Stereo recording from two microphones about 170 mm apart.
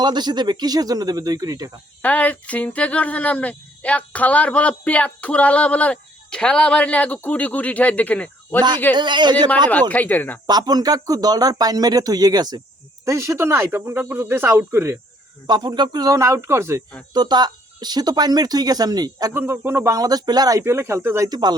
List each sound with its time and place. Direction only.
0.0 s speech: 25° right (ahead or behind)
2.0 s speech: 10° left (ahead or behind)
9.0 s speech: 25° right (ahead or behind)
9.9 s speech: 10° left (ahead or behind)
10.4 s speech: 25° right (ahead or behind)
15.4 s speech: 25° right (ahead or behind)